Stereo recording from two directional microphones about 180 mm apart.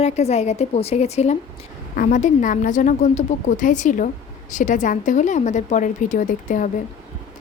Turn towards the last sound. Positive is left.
turn(degrees=45)  # may be behind; listen again after turning